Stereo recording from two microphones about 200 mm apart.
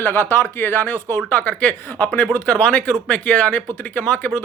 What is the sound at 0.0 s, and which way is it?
Speech, 10° left (ahead or behind).